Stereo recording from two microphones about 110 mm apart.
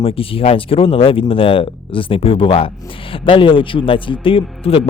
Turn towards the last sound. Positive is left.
turn(degrees=60)  # may be behind; listen again after turning